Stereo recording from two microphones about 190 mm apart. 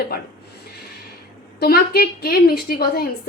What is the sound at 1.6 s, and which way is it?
A woman's voice, 55° left (ahead or behind).